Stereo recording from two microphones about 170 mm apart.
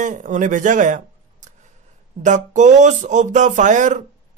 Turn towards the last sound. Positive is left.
turn(degrees=-45)  # may be behind; listen again after turning